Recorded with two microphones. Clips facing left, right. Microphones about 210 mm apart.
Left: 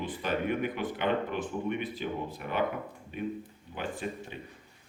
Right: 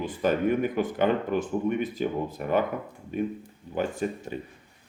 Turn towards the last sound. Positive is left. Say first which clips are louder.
# right 6 dB
turn(degrees=-45)  # may be behind; listen again after turning